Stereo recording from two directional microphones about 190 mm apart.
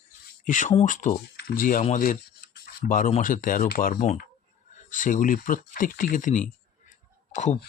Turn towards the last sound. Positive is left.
turn(degrees=40)  # may be behind; listen again after turning